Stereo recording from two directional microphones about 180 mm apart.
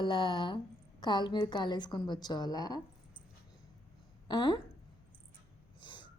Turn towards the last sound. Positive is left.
turn(degrees=25)  # may be behind; listen again after turning